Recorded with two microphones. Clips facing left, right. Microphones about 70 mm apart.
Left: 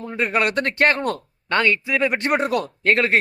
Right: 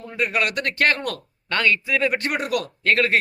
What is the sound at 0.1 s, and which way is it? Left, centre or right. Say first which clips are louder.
Speech: left 2 dB; left.